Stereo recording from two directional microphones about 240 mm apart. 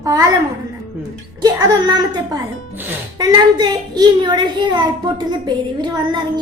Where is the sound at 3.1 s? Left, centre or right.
Centre.